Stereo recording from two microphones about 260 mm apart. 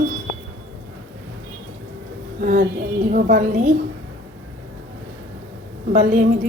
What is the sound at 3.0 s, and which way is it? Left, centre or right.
Speech, right.